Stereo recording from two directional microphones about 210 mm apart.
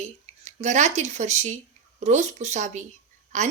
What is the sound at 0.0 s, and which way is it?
A woman's voice, 35° right (ahead or behind).